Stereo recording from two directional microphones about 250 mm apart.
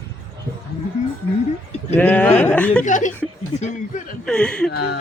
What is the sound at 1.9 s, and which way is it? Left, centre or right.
Speech, centre.